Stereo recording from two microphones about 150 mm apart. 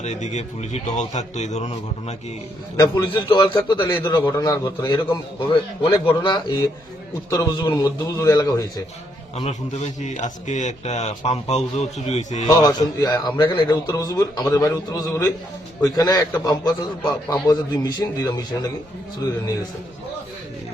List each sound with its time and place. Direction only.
0.0 s a man's voice: 50° left (ahead or behind)
2.7 s a man's voice: 25° left (ahead or behind)
9.3 s a man's voice: 45° left (ahead or behind)
12.5 s a man's voice: 25° left (ahead or behind)